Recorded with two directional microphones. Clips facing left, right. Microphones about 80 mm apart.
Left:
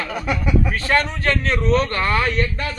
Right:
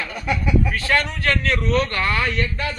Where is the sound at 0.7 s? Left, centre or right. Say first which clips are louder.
Left 2 dB; left.